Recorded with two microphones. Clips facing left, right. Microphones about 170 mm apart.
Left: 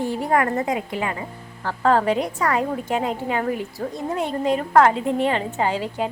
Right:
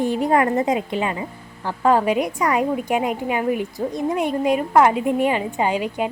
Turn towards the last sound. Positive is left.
turn(degrees=-15)  # may be behind; listen again after turning